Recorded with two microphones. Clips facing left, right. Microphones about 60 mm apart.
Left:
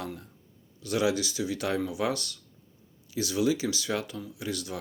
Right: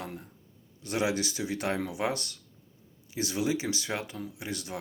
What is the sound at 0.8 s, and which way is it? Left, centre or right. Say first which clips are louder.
Speech: left 2 dB; right.